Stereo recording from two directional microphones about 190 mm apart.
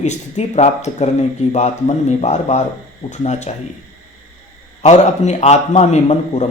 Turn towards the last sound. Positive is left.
turn(degrees=35)  # may be behind; listen again after turning